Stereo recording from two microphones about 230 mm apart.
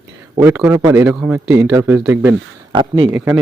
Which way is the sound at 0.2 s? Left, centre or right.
Centre.